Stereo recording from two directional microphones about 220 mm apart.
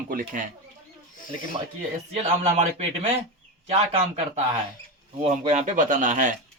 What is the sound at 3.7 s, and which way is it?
Speech, 30° right (ahead or behind).